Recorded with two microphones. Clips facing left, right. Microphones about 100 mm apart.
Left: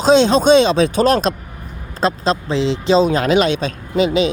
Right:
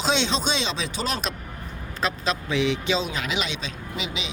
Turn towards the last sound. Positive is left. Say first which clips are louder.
# left 16 dB
turn(degrees=45)  # may be behind; listen again after turning